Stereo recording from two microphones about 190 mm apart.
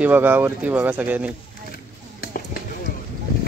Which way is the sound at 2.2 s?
50° left (ahead or behind).